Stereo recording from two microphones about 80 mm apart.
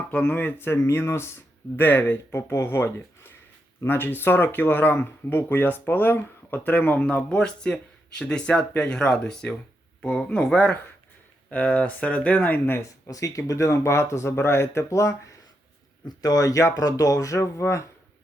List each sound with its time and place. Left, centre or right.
0.1 s speech: left
12.8 s speech: left
16.0 s speech: left